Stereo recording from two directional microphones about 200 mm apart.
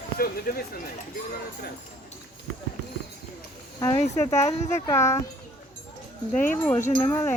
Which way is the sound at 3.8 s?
15° left (ahead or behind).